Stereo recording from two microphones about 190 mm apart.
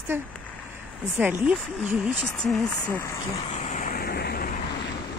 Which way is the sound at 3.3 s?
30° left (ahead or behind).